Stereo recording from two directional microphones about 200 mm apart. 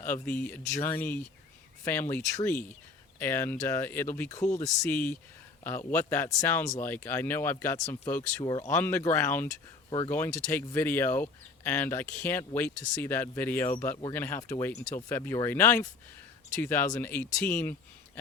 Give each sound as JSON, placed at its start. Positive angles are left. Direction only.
{"t": 0.0, "sound": "speech", "side_deg": 10}